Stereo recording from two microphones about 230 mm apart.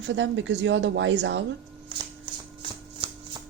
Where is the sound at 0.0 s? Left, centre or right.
Right.